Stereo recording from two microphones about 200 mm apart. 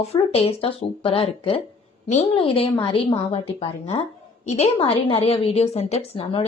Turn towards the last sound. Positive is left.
turn(degrees=25)  # may be behind; listen again after turning